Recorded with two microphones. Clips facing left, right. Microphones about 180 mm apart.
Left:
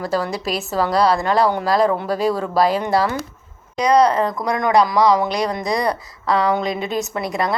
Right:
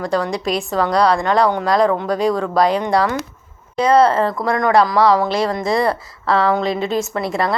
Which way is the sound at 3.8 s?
15° left (ahead or behind).